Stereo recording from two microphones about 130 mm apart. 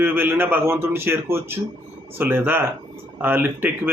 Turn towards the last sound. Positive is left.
turn(degrees=-15)  # may be behind; listen again after turning